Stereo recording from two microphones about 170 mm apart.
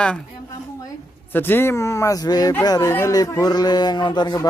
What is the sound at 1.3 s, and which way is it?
A man's voice, 10° left (ahead or behind).